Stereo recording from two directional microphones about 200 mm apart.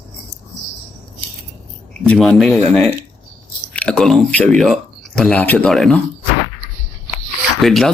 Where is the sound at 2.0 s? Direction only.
5° left (ahead or behind).